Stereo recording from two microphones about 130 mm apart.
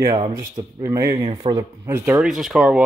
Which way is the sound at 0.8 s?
25° right (ahead or behind).